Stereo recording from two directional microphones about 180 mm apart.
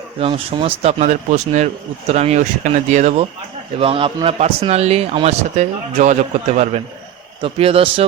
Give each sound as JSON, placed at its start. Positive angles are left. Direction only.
{"t": 0.2, "sound": "speech", "side_deg": -30}